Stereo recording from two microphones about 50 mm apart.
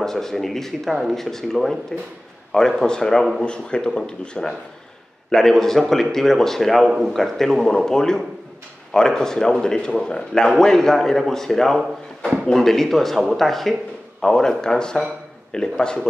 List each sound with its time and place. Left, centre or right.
0.0 s speech: centre
2.8 s a man's voice: centre